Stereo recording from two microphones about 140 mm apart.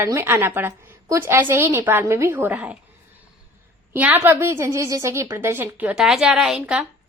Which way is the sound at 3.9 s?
15° right (ahead or behind).